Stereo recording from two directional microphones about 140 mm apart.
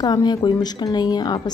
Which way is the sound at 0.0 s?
30° left (ahead or behind).